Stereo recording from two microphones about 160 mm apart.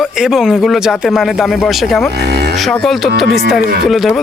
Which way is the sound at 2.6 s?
Centre (ahead or behind).